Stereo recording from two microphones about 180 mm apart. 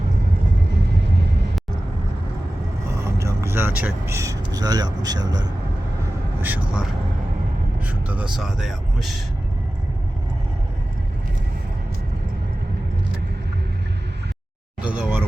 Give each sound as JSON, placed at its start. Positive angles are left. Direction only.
{"t": 0.7, "sound": "vehicle", "side_deg": -70}
{"t": 3.0, "sound": "speech", "side_deg": -15}
{"t": 6.4, "sound": "speech", "side_deg": -10}
{"t": 7.9, "sound": "speech", "side_deg": -10}
{"t": 14.8, "sound": "speech", "side_deg": -5}